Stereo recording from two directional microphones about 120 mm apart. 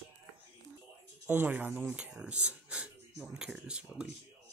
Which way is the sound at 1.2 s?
15° right (ahead or behind).